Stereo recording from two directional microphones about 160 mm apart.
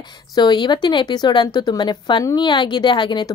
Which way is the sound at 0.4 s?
30° left (ahead or behind).